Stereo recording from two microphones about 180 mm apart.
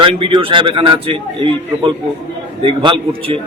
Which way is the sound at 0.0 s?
30° right (ahead or behind).